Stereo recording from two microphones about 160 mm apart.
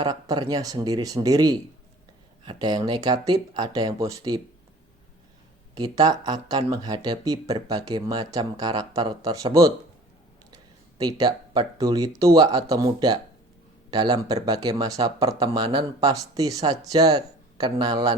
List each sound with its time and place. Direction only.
0.0 s speech: 25° right (ahead or behind)
5.7 s speech: 25° right (ahead or behind)
10.5 s a sound: 25° right (ahead or behind)
11.2 s speech: 25° right (ahead or behind)